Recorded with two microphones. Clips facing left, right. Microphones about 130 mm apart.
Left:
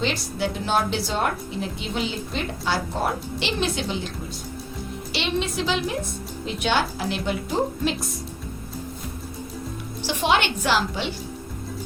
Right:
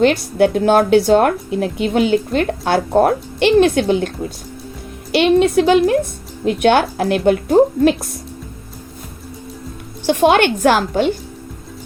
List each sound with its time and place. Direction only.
0.0 s a woman's voice: 60° right (ahead or behind)
10.1 s a woman's voice: 50° right (ahead or behind)